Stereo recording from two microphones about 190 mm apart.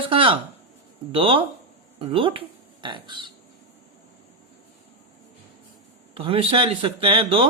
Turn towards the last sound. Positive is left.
turn(degrees=-30)  # may be behind; listen again after turning